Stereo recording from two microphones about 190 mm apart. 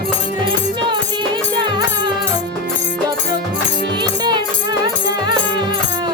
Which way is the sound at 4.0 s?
25° right (ahead or behind).